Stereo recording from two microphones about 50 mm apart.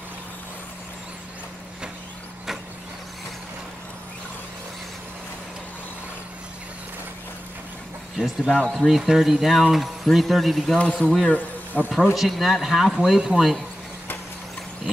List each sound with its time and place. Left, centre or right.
8.2 s speech: centre
11.7 s speech: centre
12.1 s speech: centre